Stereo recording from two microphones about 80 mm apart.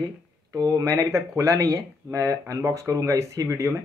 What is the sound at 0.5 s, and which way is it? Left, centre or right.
Speech, right.